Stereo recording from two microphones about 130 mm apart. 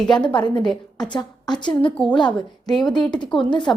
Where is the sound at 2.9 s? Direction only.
35° left (ahead or behind).